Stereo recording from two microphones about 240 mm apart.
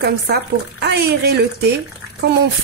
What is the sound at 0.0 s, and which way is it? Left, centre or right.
A woman's voice, right.